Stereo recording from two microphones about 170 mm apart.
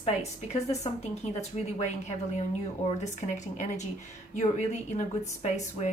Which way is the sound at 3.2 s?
45° left (ahead or behind).